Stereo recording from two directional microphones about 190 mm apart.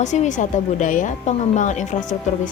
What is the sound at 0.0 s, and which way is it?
A woman's voice, 40° left (ahead or behind).